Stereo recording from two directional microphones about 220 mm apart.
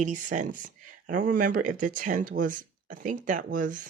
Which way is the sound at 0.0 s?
35° right (ahead or behind).